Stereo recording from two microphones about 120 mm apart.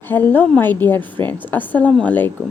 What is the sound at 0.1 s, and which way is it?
A woman's voice, 15° left (ahead or behind).